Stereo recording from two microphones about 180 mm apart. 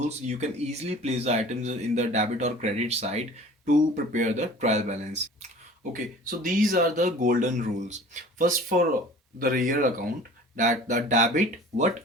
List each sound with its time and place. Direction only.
0.3 s speech: 40° right (ahead or behind)
6.4 s speech: 50° right (ahead or behind)